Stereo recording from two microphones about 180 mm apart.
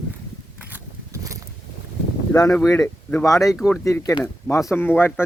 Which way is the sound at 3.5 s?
5° left (ahead or behind).